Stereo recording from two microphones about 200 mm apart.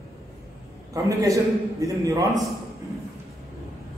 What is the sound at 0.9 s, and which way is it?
A man's voice, 15° right (ahead or behind).